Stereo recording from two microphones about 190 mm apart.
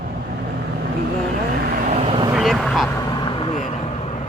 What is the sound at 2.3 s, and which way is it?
Speech, centre (ahead or behind).